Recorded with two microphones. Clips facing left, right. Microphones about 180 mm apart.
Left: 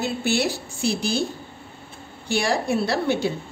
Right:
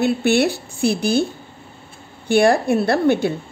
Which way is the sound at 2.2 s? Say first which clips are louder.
Right 8 dB; 55° right (ahead or behind).